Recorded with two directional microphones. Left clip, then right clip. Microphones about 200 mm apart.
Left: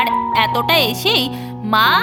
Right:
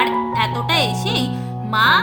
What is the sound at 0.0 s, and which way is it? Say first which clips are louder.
Music: left 3 dB; 40° left (ahead or behind).